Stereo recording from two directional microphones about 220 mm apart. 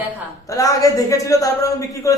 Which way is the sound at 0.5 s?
15° left (ahead or behind).